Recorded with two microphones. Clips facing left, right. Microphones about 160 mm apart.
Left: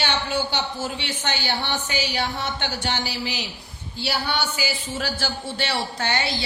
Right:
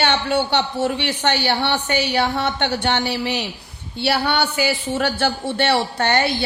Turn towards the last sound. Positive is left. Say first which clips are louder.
# right 7 dB
turn(degrees=-55)  # may be behind; listen again after turning